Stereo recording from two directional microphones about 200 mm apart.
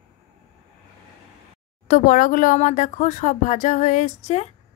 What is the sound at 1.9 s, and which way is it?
Speech, 45° left (ahead or behind).